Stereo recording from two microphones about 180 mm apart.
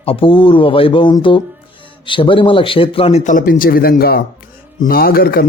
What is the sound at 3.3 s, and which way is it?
Speech, 50° left (ahead or behind).